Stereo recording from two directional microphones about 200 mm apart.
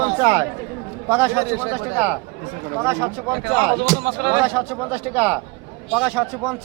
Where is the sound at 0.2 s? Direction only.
15° right (ahead or behind).